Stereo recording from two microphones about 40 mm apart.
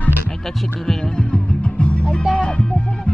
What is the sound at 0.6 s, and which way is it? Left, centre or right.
Music, centre.